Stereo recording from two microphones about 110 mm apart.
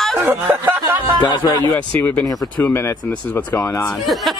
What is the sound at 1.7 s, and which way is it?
Speech, 15° left (ahead or behind).